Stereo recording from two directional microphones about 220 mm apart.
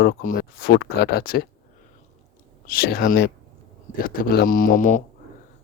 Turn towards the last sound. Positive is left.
turn(degrees=35)  # may be behind; listen again after turning